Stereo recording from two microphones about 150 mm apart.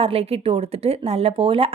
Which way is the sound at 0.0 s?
40° right (ahead or behind).